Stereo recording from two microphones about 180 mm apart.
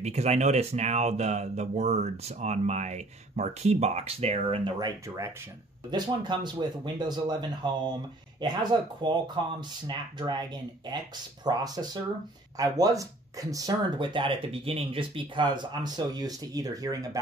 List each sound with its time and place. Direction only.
0.0 s speech: 35° right (ahead or behind); by 17.2 s 20° right (ahead or behind)